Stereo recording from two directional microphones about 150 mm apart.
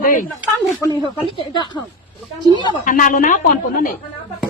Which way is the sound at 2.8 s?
60° left (ahead or behind).